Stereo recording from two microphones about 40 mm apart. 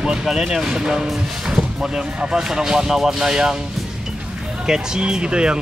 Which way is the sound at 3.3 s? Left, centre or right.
Centre.